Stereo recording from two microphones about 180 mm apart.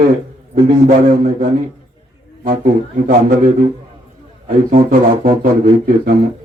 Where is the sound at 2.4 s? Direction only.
50° right (ahead or behind).